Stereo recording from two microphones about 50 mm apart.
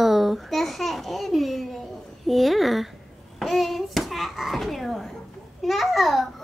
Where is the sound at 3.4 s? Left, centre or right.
Centre.